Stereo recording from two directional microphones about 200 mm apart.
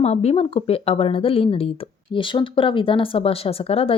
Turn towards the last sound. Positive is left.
turn(degrees=30)  # may be behind; listen again after turning